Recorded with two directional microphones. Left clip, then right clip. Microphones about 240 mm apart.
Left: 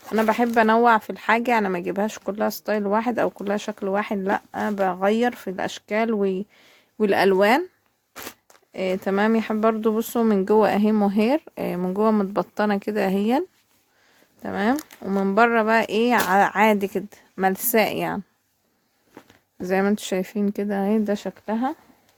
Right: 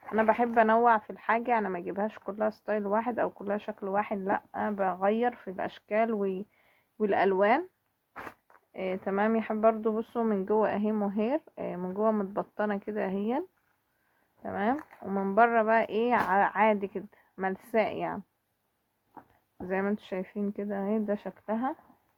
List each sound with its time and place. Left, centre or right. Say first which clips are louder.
0.1 s speech: left 5 dB; left
8.7 s speech: left 8 dB; left
14.4 s speech: left 6 dB; left
19.6 s speech: left 9 dB; left